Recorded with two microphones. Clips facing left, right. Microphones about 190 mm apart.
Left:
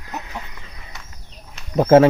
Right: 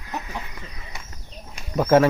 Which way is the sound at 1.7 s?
30° left (ahead or behind).